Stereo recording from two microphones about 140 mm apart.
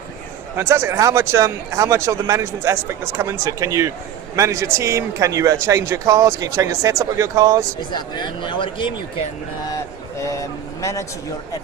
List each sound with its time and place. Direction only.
0.5 s speech: 20° right (ahead or behind)
7.8 s speech: 30° left (ahead or behind)
9.6 s vehicle: 20° left (ahead or behind)